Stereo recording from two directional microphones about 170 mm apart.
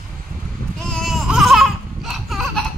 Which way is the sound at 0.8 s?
Centre (ahead or behind).